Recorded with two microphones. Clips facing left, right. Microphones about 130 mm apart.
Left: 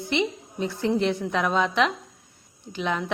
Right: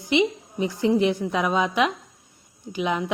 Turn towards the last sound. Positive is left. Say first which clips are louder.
# right 3 dB
turn(degrees=-10)  # may be behind; listen again after turning